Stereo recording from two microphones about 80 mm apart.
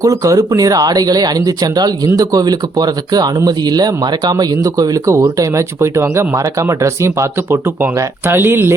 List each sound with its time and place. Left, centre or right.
0.0 s speech: right